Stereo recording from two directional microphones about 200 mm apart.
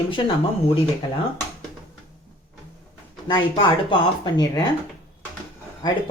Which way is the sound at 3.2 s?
25° left (ahead or behind).